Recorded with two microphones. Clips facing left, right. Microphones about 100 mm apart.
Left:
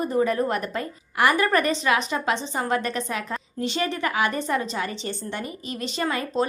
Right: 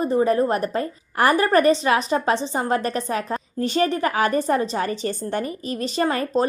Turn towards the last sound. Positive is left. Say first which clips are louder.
# right 5 dB
turn(degrees=-35)  # may be behind; listen again after turning